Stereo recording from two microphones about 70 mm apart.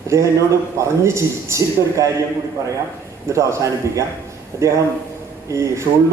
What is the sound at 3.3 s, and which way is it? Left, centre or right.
A man's voice, right.